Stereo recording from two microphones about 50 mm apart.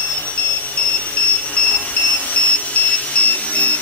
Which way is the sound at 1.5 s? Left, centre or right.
Left.